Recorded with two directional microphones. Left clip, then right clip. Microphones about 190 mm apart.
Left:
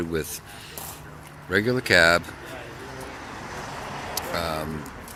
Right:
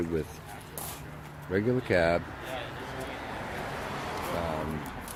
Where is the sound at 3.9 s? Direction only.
45° right (ahead or behind).